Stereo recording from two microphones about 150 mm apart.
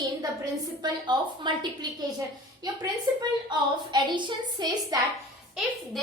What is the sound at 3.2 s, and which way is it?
A woman's voice, 30° right (ahead or behind).